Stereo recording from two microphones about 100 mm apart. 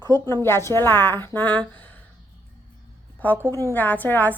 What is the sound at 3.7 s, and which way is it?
Speech, 15° left (ahead or behind).